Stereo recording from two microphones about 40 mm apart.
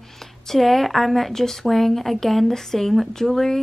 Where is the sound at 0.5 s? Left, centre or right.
Centre.